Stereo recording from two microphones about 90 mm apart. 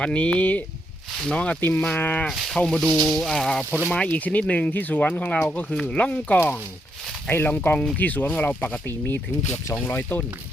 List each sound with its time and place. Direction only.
0.0 s speech: 15° left (ahead or behind)
2.2 s speech: centre (ahead or behind); by 10.2 s 15° left (ahead or behind)